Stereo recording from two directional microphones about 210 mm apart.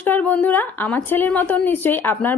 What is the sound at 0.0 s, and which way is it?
A woman's voice, 5° left (ahead or behind).